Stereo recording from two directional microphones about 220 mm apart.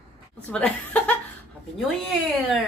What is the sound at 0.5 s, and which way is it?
Speech, 5° left (ahead or behind).